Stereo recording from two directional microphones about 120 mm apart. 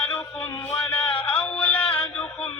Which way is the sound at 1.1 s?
45° left (ahead or behind).